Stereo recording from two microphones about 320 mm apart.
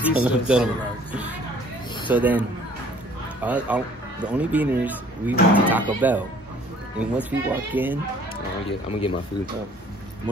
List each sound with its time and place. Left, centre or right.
0.0 s speech: centre
2.0 s speech: centre
3.4 s speech: centre
8.6 s speech: centre